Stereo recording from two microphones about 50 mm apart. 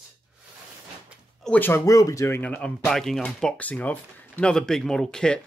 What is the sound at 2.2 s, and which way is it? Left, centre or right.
Speech, left.